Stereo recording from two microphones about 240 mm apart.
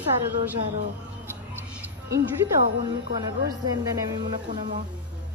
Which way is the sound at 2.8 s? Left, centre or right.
Centre.